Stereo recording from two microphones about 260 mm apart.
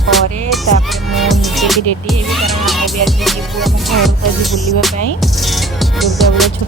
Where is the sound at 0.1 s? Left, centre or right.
Centre.